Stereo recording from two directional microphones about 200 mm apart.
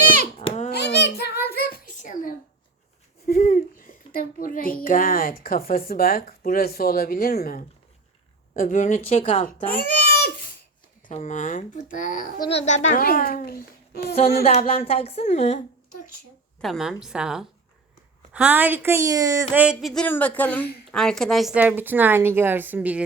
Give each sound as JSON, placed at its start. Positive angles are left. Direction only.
{"t": 0.3, "sound": "a sound", "side_deg": 30}
{"t": 0.7, "sound": "a sound", "side_deg": 55}
{"t": 3.2, "sound": "a child's voice", "side_deg": 45}
{"t": 9.5, "sound": "speech", "side_deg": 45}
{"t": 11.0, "sound": "speech", "side_deg": 40}
{"t": 12.4, "sound": "speech", "side_deg": 30}
{"t": 13.1, "sound": "speech", "side_deg": 50}
{"t": 14.4, "sound": "speech", "side_deg": 30}
{"t": 16.6, "sound": "a woman's voice", "side_deg": 0}